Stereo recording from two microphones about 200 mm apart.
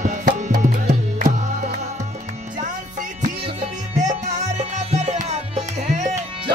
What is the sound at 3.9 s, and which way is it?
Music, 35° right (ahead or behind).